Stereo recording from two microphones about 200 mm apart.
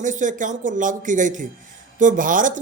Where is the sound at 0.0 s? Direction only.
40° right (ahead or behind).